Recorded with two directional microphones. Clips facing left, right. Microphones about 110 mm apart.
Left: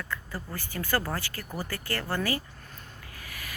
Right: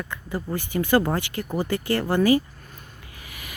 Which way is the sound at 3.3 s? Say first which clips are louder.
Right 1 dB; 15° right (ahead or behind).